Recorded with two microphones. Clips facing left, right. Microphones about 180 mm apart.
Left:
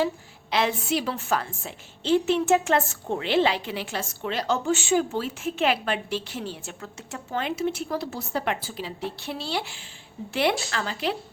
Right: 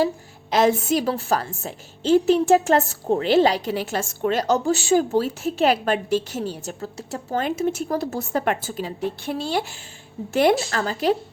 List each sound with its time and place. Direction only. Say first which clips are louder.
0.5 s a woman's voice: right 6 dB; 40° right (ahead or behind)